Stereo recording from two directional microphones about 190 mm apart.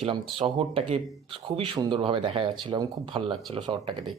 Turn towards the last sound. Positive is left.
turn(degrees=-25)  # may be behind; listen again after turning